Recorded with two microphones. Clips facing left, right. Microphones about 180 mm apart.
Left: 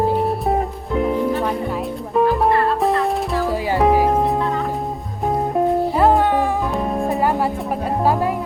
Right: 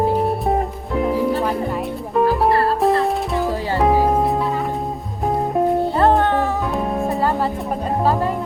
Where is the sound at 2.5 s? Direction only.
35° right (ahead or behind).